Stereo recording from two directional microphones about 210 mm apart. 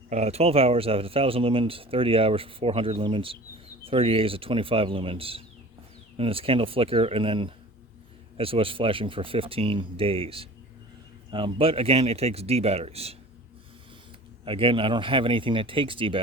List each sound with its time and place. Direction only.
0.1 s speech: 30° right (ahead or behind)
14.4 s speech: 25° right (ahead or behind)